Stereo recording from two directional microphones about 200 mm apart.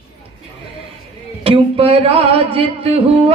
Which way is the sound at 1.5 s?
30° right (ahead or behind).